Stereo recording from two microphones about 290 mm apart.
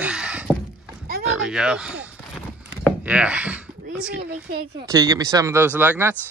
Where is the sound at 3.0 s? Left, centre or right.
Centre.